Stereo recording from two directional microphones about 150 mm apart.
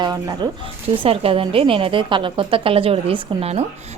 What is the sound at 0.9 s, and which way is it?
A woman's voice, 40° right (ahead or behind).